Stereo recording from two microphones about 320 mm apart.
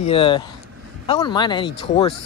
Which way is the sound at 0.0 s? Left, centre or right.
Centre.